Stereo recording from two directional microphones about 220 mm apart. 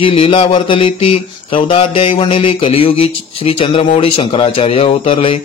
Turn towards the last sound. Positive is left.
turn(degrees=25)  # may be behind; listen again after turning